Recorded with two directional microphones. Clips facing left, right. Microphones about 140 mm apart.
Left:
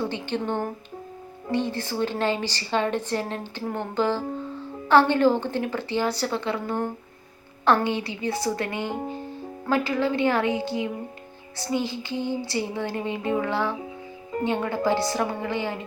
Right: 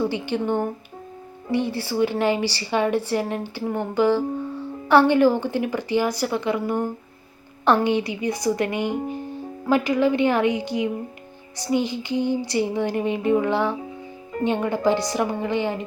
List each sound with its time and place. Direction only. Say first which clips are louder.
0.0 s speech: right 4 dB; 10° right (ahead or behind)